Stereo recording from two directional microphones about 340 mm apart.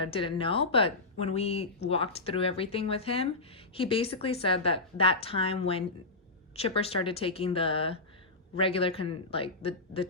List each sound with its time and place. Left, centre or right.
0.0 s speech: centre